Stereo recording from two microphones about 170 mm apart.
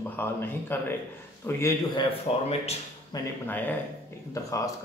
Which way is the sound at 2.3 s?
35° left (ahead or behind).